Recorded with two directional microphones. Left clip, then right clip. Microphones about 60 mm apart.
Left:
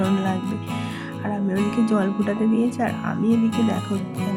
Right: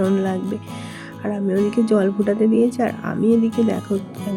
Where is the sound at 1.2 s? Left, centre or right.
Right.